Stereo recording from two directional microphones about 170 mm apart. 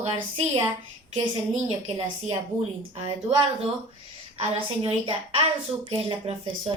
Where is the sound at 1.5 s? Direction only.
35° right (ahead or behind).